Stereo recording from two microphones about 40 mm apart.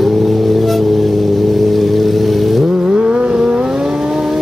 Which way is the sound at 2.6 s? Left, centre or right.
Right.